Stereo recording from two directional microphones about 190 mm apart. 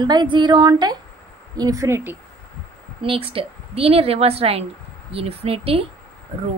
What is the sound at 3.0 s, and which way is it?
Speech, 30° right (ahead or behind).